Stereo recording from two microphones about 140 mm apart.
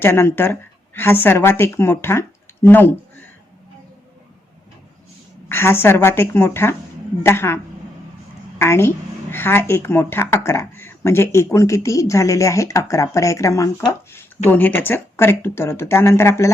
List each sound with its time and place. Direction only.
0.0 s speech: 15° left (ahead or behind)
5.5 s a woman's voice: 15° left (ahead or behind)